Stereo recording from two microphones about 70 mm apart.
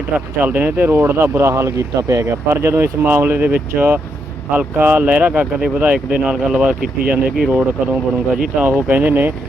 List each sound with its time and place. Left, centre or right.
0.1 s speech: right
3.0 s speech: right